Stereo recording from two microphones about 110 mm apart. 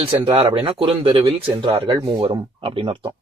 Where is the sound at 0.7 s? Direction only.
50° right (ahead or behind).